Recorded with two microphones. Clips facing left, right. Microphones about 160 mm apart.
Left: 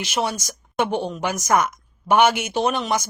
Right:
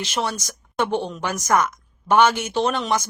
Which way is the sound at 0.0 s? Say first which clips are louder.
Left 1 dB; 10° left (ahead or behind).